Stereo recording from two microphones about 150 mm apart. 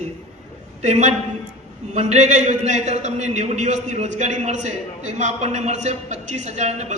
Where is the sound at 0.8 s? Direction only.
50° right (ahead or behind).